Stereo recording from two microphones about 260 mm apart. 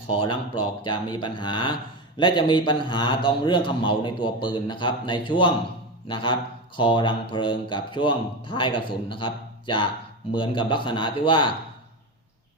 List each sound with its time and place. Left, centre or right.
0.1 s speech: centre